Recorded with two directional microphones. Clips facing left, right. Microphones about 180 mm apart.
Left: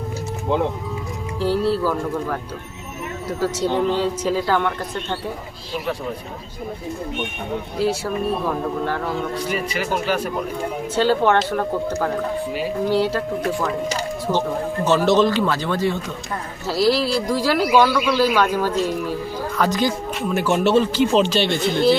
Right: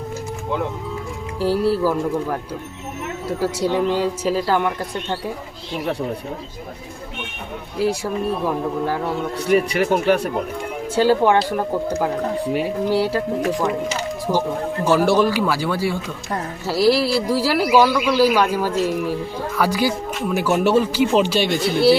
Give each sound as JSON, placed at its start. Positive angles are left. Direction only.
{"t": 1.4, "sound": "speech", "side_deg": -10}
{"t": 7.8, "sound": "speech", "side_deg": -10}
{"t": 9.5, "sound": "speech", "side_deg": -60}
{"t": 10.9, "sound": "speech", "side_deg": -10}
{"t": 14.8, "sound": "speech", "side_deg": -10}